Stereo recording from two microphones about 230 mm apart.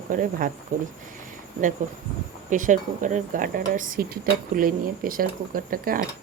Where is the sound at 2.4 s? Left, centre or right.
Right.